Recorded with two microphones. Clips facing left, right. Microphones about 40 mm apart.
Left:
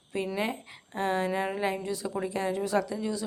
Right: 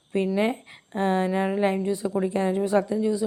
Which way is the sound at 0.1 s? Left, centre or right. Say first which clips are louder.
Right 7 dB; right.